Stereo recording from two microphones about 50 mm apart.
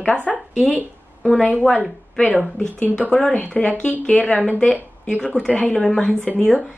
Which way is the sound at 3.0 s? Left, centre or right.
Centre.